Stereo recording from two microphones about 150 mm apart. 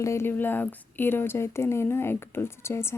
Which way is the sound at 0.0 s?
15° left (ahead or behind).